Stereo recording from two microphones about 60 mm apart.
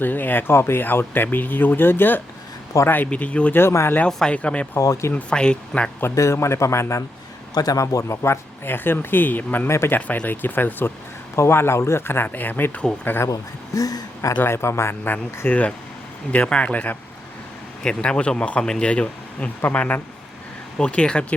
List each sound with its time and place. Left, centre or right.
0.0 s speech: left
4.8 s speech: left
5.1 s speech: centre
6.1 s speech: left
7.5 s speech: left
9.6 s speech: left
10.2 s speech: left
13.2 s speech: left
14.4 s speech: left
15.4 s speech: left